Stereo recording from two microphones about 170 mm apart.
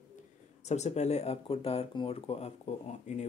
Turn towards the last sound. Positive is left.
turn(degrees=45)  # may be behind; listen again after turning